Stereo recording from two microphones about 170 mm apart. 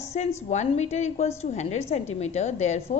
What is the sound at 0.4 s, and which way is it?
A woman's voice, 40° left (ahead or behind).